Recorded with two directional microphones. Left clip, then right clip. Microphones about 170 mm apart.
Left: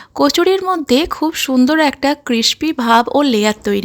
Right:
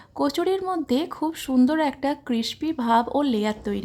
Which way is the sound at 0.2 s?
20° left (ahead or behind).